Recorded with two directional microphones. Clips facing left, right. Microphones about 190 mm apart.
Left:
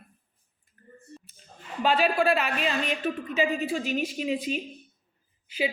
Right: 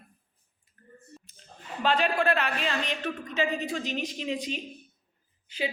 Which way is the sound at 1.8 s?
10° left (ahead or behind).